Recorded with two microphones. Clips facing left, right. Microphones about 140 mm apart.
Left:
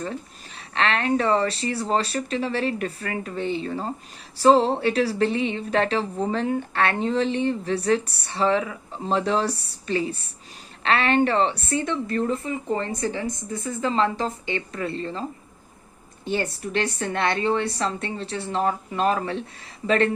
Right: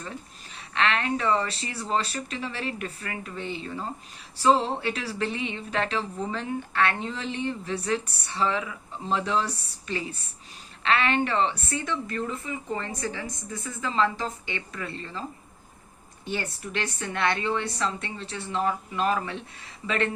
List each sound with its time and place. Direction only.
0.7 s speech: 35° left (ahead or behind)
16.3 s speech: 35° left (ahead or behind)